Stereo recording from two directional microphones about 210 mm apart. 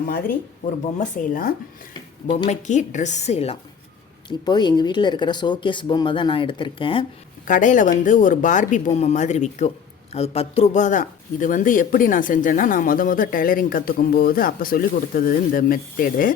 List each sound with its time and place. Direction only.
0.1 s speech: 45° left (ahead or behind); by 7.0 s 25° left (ahead or behind)
7.4 s speech: 40° left (ahead or behind)